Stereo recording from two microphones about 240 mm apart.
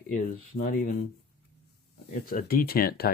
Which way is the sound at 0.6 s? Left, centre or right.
Left.